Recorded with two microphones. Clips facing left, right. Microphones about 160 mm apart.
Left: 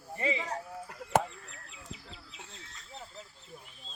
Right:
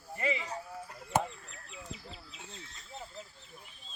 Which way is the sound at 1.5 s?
20° right (ahead or behind).